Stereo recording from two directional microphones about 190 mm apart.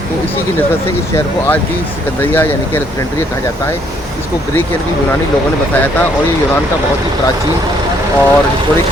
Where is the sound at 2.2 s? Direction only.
10° left (ahead or behind).